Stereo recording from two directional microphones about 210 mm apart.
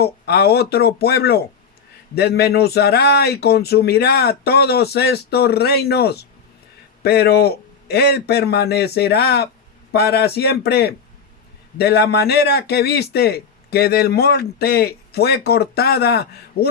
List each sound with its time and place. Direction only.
0.0 s a man's voice: 50° left (ahead or behind)